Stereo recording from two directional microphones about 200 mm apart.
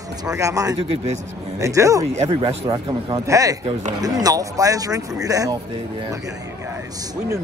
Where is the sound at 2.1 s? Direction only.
30° right (ahead or behind).